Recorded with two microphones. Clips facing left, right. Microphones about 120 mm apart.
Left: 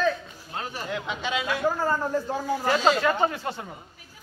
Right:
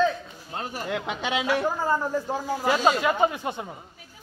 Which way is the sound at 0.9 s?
70° right (ahead or behind).